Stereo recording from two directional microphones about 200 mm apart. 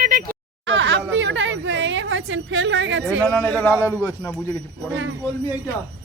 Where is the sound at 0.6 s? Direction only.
65° right (ahead or behind).